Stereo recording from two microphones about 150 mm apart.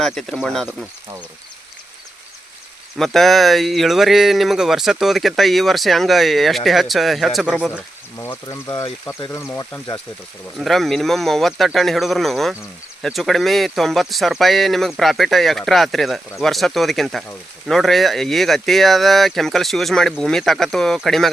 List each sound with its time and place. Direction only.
0.0 s speech: centre (ahead or behind)
3.0 s speech: centre (ahead or behind)
8.2 s speech: 20° left (ahead or behind)
10.6 s speech: centre (ahead or behind)